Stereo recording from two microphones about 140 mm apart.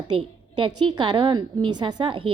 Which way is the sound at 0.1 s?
35° right (ahead or behind).